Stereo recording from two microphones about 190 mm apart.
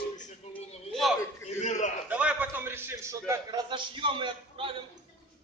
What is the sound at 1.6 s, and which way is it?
Speech, 40° left (ahead or behind).